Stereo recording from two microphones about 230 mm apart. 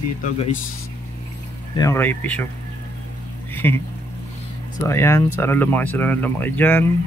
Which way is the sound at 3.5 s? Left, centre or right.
Centre.